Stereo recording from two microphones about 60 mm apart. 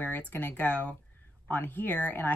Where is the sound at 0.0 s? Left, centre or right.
Left.